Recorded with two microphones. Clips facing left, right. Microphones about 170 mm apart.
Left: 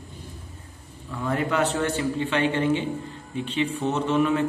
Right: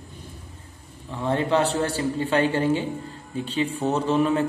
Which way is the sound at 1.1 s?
30° right (ahead or behind).